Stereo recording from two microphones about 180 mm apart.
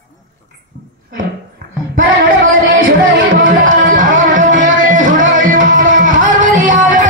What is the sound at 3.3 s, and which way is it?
Music, 50° right (ahead or behind).